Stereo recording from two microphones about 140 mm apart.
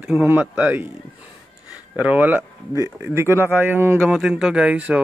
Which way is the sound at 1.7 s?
10° right (ahead or behind).